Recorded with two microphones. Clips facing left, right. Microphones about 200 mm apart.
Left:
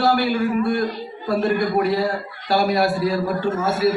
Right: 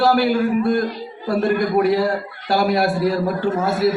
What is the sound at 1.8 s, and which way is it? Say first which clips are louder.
Speech: right 3 dB; 55° right (ahead or behind).